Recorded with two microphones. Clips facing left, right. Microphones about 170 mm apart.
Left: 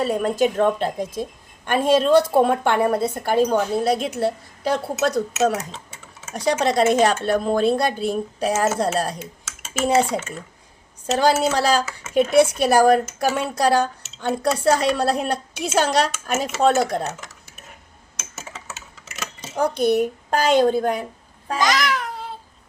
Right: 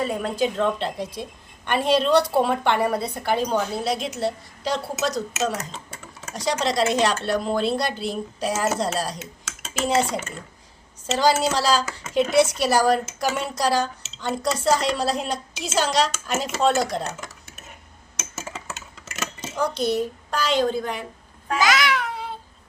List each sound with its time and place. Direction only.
0.0 s a woman's voice: 55° left (ahead or behind)
5.7 s a sound: centre (ahead or behind)
6.3 s a woman's voice: 55° left (ahead or behind)
11.5 s speech: 60° left (ahead or behind)
18.3 s typing: centre (ahead or behind)
19.5 s a woman's voice: 55° left (ahead or behind)
21.6 s a sound: centre (ahead or behind)